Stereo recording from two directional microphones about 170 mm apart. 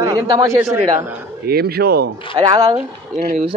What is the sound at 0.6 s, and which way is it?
Speech, 10° right (ahead or behind).